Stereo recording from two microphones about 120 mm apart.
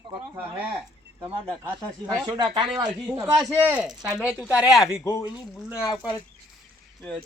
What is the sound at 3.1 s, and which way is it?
Speech, 20° right (ahead or behind).